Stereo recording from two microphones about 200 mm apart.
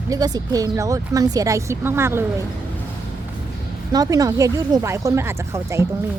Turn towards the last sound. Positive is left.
turn(degrees=-15)  # may be behind; listen again after turning